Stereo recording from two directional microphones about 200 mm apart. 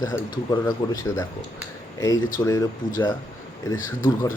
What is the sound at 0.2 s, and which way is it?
Speech, 20° left (ahead or behind).